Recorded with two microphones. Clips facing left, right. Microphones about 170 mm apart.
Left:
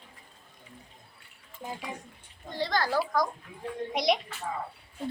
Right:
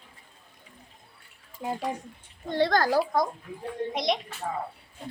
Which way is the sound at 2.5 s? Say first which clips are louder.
Right 6 dB; 55° right (ahead or behind).